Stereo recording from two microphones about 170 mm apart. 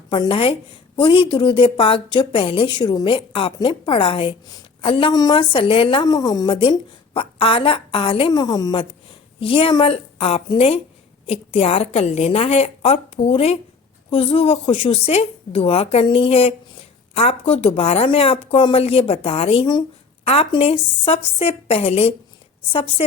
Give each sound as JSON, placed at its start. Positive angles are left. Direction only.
{"t": 0.1, "sound": "a woman's voice", "side_deg": 30}